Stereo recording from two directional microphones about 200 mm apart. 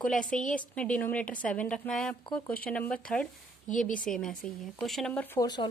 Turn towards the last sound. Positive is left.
turn(degrees=20)  # may be behind; listen again after turning